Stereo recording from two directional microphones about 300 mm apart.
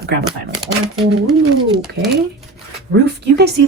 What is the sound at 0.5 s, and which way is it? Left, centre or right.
Speech, centre.